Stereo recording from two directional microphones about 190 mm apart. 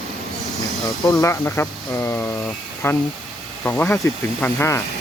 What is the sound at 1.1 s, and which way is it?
Speech, 15° left (ahead or behind).